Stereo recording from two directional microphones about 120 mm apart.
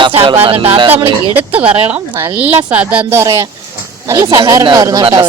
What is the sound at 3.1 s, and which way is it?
Speech, 25° right (ahead or behind).